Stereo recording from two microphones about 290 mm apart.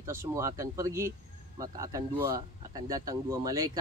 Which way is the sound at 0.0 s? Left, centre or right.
Centre.